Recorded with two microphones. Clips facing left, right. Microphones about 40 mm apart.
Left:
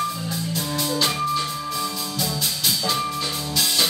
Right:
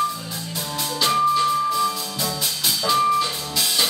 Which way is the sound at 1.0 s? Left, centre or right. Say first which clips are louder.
Right 10 dB; centre.